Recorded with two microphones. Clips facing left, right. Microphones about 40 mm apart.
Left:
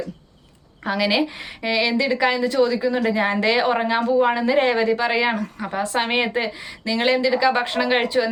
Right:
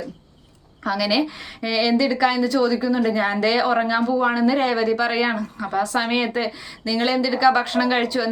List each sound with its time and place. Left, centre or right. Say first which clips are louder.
0.9 s a woman's voice: even; left